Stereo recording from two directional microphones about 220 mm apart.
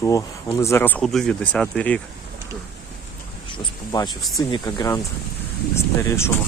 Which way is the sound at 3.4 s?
20° left (ahead or behind).